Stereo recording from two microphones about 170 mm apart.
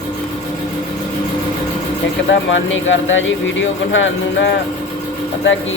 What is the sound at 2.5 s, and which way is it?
Speech, 90° left.